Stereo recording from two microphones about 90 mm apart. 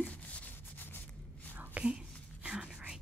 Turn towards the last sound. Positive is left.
turn(degrees=-5)  # may be behind; listen again after turning